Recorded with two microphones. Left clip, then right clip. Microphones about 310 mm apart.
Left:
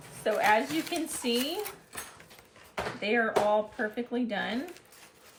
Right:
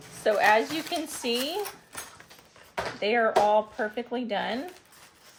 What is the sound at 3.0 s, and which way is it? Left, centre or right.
A woman's voice, centre.